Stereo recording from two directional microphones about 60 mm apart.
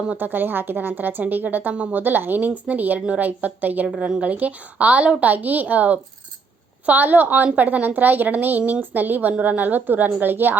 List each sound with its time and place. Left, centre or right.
0.1 s a woman's voice: right